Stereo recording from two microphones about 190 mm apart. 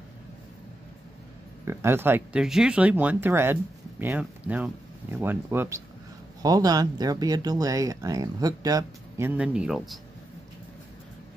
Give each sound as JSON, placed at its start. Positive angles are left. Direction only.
{"t": 1.7, "sound": "speech", "side_deg": -15}